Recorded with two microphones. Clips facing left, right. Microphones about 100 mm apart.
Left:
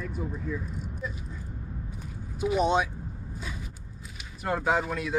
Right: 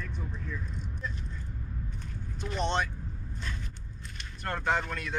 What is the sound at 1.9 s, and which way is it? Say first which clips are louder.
Vehicle: left 2 dB; 10° left (ahead or behind).